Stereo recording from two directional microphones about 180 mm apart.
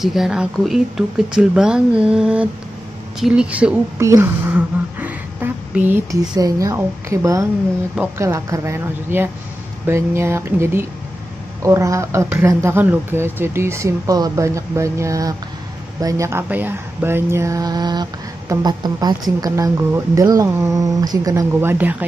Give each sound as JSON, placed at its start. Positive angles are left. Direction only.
{"t": 0.0, "sound": "speech", "side_deg": 0}
{"t": 4.1, "sound": "a sound", "side_deg": -10}
{"t": 5.9, "sound": "a woman's voice", "side_deg": -10}